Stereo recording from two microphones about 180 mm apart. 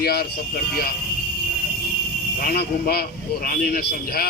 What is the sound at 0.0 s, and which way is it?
Speech, 60° left (ahead or behind).